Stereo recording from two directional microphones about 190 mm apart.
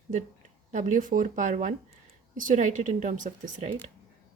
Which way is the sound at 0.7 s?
45° right (ahead or behind).